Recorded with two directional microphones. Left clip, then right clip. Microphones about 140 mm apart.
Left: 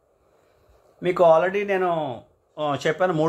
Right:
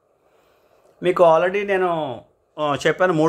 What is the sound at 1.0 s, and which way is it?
Speech, 30° right (ahead or behind).